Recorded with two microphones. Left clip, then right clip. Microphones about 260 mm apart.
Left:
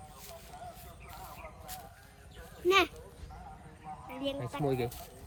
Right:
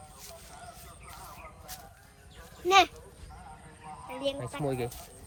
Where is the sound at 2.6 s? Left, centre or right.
Centre.